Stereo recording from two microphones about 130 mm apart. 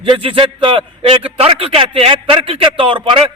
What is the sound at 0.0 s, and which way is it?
A man's voice, 40° right (ahead or behind).